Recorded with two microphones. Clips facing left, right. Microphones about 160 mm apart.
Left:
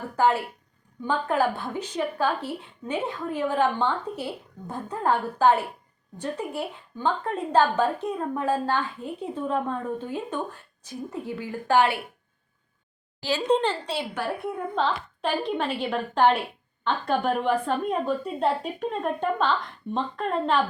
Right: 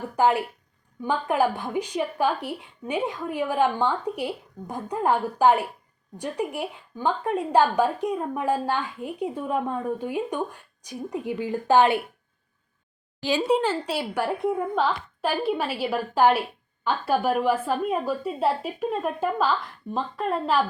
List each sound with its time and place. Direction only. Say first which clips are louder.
0.2 s a woman's voice: right 1 dB; 15° right (ahead or behind)
13.2 s a woman's voice: right 1 dB; 10° right (ahead or behind)